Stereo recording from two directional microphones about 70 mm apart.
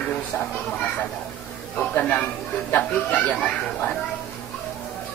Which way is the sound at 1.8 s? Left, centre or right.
Centre.